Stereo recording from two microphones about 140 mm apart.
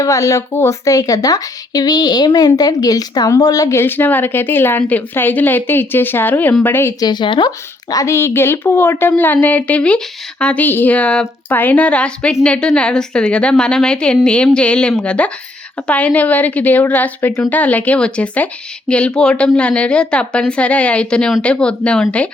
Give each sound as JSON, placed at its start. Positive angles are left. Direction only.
{"t": 0.0, "sound": "a woman's voice", "side_deg": 25}
{"t": 7.0, "sound": "a woman's voice", "side_deg": 30}